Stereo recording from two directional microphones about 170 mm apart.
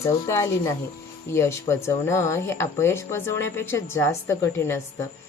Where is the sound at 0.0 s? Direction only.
15° left (ahead or behind).